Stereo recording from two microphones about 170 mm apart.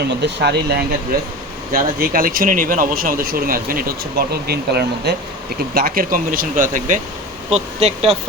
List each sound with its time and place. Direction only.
0.1 s speech: 85° right
1.7 s speech: 60° right (ahead or behind)
5.7 s speech: 60° right (ahead or behind)
7.8 s speech: 40° right (ahead or behind)